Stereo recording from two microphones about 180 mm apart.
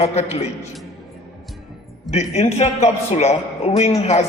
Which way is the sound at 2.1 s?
35° left (ahead or behind).